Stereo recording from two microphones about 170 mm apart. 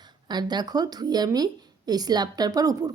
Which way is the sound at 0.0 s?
25° right (ahead or behind).